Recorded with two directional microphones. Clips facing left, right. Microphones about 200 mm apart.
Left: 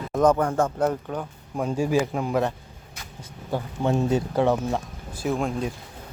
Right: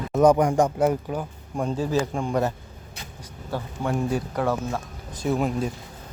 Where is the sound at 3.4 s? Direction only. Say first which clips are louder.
Left 3 dB; 20° left (ahead or behind).